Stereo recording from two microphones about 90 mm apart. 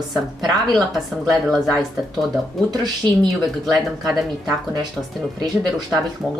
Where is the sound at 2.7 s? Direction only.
50° right (ahead or behind).